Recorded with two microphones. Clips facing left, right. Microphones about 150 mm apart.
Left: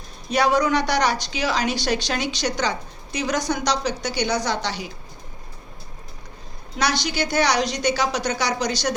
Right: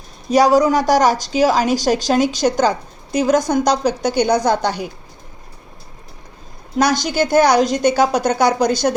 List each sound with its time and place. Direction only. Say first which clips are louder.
0.3 s a woman's voice: right 7 dB; 40° right (ahead or behind)
6.7 s a woman's voice: right 7 dB; 45° right (ahead or behind)